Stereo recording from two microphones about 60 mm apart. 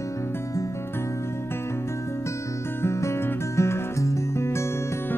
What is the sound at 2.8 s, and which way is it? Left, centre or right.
Music, left.